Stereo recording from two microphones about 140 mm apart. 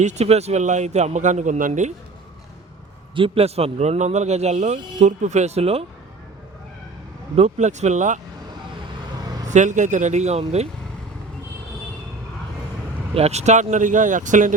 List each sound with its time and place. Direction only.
0.0 s a man's voice: 55° right (ahead or behind)
3.2 s speech: 40° right (ahead or behind)
7.3 s a man's voice: 50° right (ahead or behind)
9.2 s vehicle: 25° right (ahead or behind)
9.5 s a man's voice: 60° right (ahead or behind)
13.1 s a man's voice: 50° right (ahead or behind)